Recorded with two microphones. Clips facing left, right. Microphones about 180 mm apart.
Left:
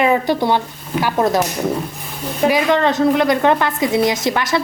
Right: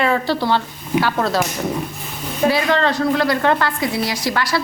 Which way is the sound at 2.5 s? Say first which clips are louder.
Left 3 dB; 15° left (ahead or behind).